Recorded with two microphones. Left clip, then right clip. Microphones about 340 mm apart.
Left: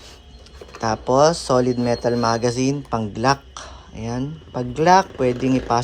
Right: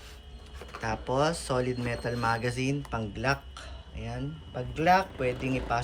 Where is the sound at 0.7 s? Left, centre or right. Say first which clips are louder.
Left 11 dB; centre.